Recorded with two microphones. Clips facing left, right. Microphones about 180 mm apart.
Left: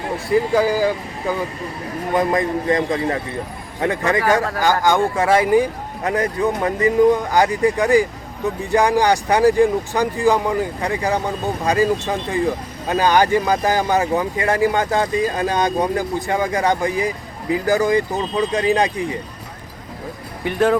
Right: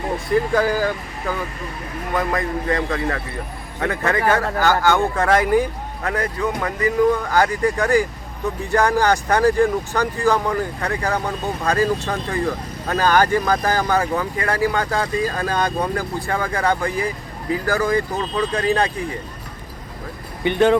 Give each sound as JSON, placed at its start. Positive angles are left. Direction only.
{"t": 0.3, "sound": "speech", "side_deg": 10}
{"t": 1.2, "sound": "speech", "side_deg": 25}
{"t": 6.0, "sound": "speech", "side_deg": 20}
{"t": 20.4, "sound": "speech", "side_deg": 0}